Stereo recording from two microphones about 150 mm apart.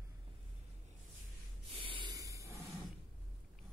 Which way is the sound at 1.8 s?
35° right (ahead or behind).